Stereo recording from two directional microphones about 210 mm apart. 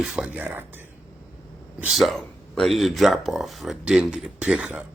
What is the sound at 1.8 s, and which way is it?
Speech, centre (ahead or behind).